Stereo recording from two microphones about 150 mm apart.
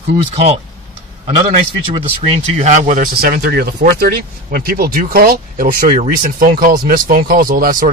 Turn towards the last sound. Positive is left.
turn(degrees=-70)  # may be behind; listen again after turning